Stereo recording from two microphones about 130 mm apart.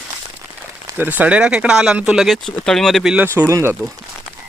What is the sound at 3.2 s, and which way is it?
Speech, 20° right (ahead or behind).